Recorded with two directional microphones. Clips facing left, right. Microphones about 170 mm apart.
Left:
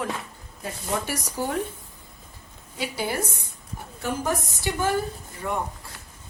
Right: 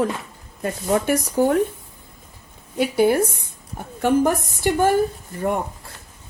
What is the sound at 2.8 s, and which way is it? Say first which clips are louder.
Speech: right 11 dB; 55° right (ahead or behind).